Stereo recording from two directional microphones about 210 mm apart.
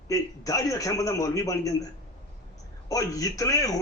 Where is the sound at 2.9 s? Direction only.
15° left (ahead or behind).